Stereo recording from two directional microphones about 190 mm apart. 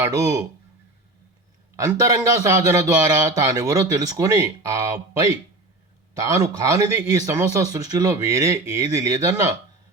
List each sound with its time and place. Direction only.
0.0 s a man's voice: 15° right (ahead or behind)
1.7 s a man's voice: 15° right (ahead or behind)